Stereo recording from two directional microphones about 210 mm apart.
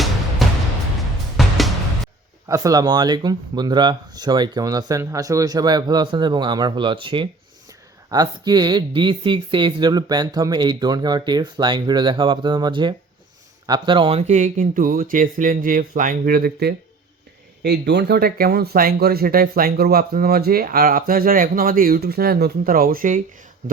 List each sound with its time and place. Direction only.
0.4 s music: centre (ahead or behind)
2.5 s speech: 15° right (ahead or behind); by 23.2 s 40° right (ahead or behind)